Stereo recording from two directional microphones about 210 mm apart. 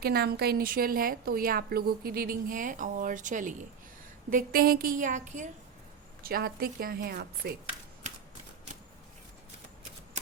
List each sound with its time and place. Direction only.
0.0 s a woman's voice: 50° right (ahead or behind)